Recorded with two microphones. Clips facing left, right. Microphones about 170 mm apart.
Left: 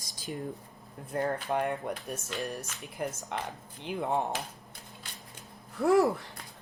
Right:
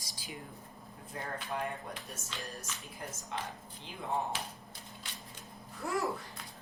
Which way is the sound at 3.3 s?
65° left (ahead or behind).